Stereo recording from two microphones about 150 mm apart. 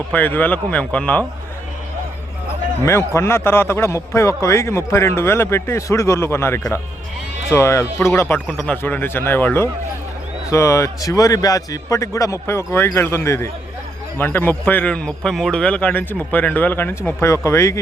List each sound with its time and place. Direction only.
0.1 s a man's voice: 10° left (ahead or behind)
2.8 s a man's voice: 20° left (ahead or behind)
8.4 s a man's voice: 5° left (ahead or behind)